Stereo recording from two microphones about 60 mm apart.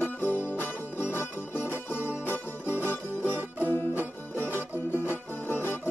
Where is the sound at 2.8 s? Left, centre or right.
Left.